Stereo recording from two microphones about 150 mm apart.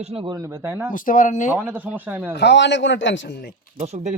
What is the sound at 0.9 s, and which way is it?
Speech, 65° left (ahead or behind).